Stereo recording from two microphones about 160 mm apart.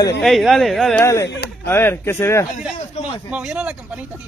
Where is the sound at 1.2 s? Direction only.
90° left.